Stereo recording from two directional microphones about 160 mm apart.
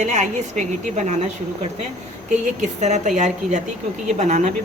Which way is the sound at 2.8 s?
45° right (ahead or behind).